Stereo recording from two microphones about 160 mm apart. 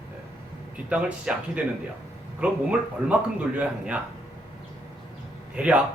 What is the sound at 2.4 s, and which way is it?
Speech, 10° right (ahead or behind).